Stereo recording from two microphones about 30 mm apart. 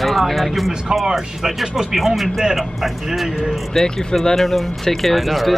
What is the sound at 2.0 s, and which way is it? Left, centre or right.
Speech, centre.